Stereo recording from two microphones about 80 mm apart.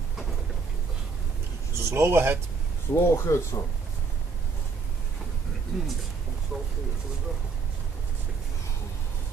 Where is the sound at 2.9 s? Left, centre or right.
Left.